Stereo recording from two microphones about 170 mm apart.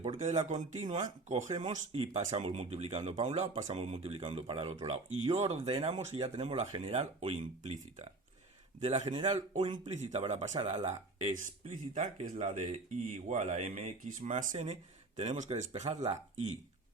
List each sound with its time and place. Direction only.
0.0 s speech: 45° right (ahead or behind)
9.0 s speech: 25° right (ahead or behind)
9.8 s speech: 45° right (ahead or behind)